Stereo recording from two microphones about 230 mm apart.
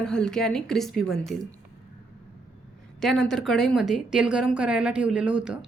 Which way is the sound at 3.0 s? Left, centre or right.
Centre.